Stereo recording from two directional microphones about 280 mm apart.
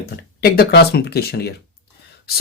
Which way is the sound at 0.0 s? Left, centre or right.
Left.